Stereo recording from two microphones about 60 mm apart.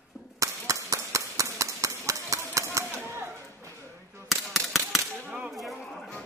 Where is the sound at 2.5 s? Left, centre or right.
Right.